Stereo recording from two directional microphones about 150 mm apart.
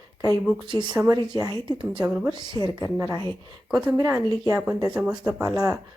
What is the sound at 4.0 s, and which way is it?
A woman's voice, 20° right (ahead or behind).